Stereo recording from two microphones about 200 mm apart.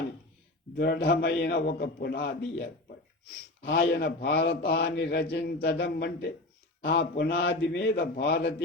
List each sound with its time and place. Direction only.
0.8 s a man's voice: 55° left (ahead or behind)